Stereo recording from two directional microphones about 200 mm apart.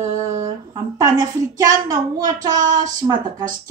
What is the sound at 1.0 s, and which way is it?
A woman's voice, 20° right (ahead or behind).